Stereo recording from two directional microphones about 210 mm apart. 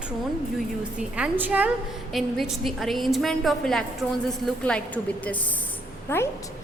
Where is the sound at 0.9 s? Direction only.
5° right (ahead or behind); by 6.2 s 10° left (ahead or behind).